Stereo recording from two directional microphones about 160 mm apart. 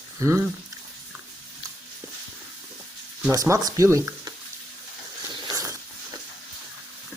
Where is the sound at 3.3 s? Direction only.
20° right (ahead or behind).